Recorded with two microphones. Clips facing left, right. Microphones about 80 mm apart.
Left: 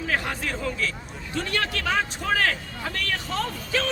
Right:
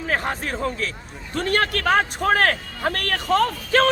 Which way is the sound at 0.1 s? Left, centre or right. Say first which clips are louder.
Right 4 dB; right.